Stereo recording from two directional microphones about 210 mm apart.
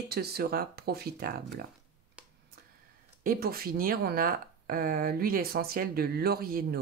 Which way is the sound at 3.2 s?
45° right (ahead or behind).